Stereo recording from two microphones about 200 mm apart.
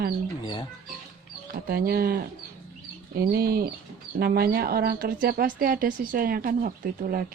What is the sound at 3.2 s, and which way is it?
Speech, 50° right (ahead or behind).